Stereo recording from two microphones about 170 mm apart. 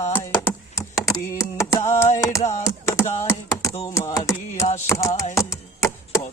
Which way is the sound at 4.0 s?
20° left (ahead or behind).